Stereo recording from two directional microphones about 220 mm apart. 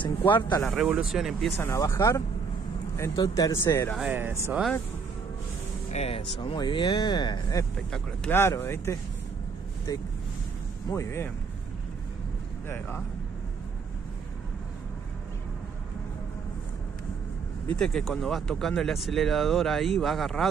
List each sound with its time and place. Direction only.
0.4 s speech: 20° left (ahead or behind)
0.7 s speech: 5° right (ahead or behind)
1.6 s speech: 10° left (ahead or behind)
4.0 s speech: 10° right (ahead or behind)
5.9 s speech: 30° left (ahead or behind)
7.9 s speech: 5° left (ahead or behind)
12.6 s speech: 10° left (ahead or behind)
17.7 s speech: centre (ahead or behind)